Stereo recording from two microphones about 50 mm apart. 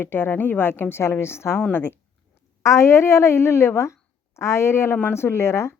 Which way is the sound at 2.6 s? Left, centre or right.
Left.